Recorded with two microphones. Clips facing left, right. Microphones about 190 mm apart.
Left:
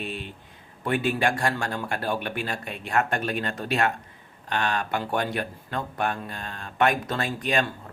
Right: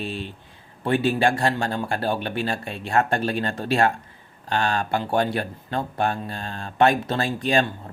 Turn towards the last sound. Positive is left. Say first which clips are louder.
# right 4 dB
turn(degrees=-30)  # may be behind; listen again after turning